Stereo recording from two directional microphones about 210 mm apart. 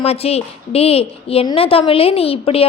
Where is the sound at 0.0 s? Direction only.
30° left (ahead or behind).